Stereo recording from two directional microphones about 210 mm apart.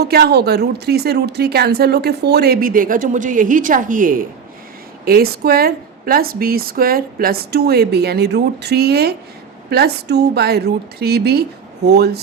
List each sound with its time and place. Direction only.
0.0 s a woman's voice: 50° right (ahead or behind)